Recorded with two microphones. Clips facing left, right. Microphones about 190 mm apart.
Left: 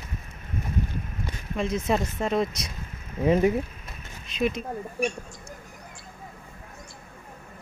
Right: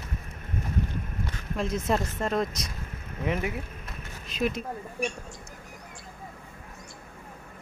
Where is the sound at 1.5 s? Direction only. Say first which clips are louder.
Left 2 dB; centre (ahead or behind).